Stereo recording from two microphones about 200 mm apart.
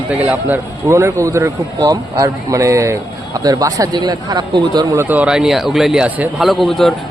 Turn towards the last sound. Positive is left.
turn(degrees=0)  # may be behind; listen again after turning